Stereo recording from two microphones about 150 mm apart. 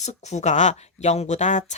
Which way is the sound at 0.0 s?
50° left (ahead or behind).